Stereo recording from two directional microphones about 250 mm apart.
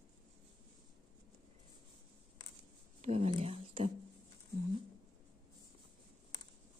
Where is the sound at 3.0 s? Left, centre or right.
Right.